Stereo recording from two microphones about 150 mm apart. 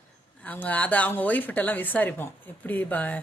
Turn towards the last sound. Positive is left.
turn(degrees=10)  # may be behind; listen again after turning